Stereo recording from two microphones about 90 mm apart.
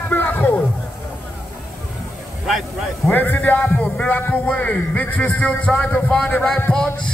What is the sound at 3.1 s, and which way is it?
A man's voice, 20° left (ahead or behind).